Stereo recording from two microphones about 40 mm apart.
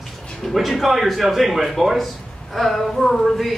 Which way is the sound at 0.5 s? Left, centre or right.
Centre.